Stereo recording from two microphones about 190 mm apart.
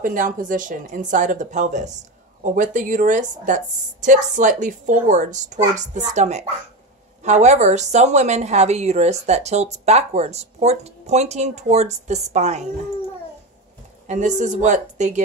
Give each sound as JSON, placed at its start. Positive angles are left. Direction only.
{"t": 0.0, "sound": "speech", "side_deg": -45}
{"t": 14.0, "sound": "speech", "side_deg": -40}